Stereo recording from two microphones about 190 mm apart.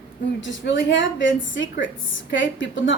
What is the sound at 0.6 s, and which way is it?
A woman's voice, 70° left (ahead or behind).